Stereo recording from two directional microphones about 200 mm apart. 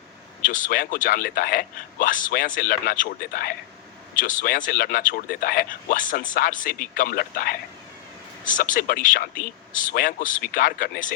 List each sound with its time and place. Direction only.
0.4 s speech: 40° left (ahead or behind)